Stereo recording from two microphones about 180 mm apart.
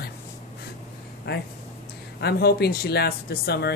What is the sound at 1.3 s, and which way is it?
Speech, 65° left (ahead or behind).